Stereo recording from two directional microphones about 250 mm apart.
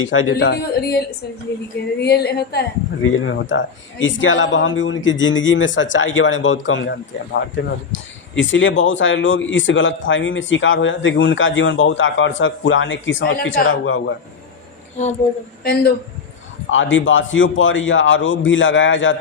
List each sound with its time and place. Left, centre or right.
0.0 s a man's voice: left
8.4 s a man's voice: left
15.6 s a man's voice: left
16.6 s a man's voice: left